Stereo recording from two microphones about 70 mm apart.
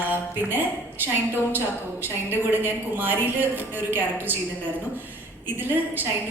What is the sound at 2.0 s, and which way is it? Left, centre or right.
A woman's voice, right.